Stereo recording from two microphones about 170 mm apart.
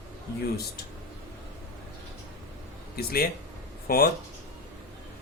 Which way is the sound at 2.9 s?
65° left (ahead or behind).